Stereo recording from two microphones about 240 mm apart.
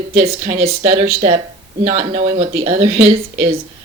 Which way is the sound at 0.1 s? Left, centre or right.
Right.